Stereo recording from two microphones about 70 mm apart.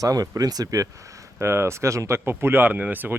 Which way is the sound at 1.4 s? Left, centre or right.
Right.